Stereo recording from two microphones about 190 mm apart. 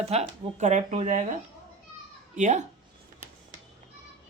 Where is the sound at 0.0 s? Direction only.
35° right (ahead or behind).